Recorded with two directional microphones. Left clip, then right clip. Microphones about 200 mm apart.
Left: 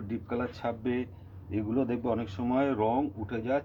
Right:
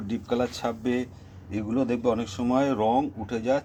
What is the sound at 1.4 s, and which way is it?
Speech, 15° right (ahead or behind).